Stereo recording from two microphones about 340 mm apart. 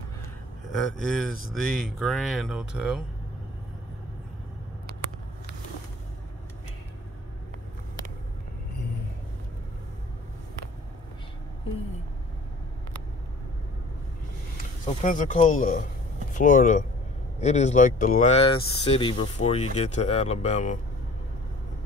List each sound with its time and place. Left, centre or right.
0.7 s speech: centre
14.9 s speech: left